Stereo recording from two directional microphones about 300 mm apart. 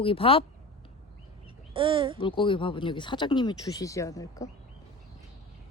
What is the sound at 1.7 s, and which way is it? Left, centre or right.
Speech, centre.